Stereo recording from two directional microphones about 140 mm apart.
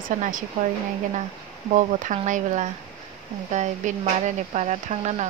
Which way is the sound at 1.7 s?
65° right (ahead or behind).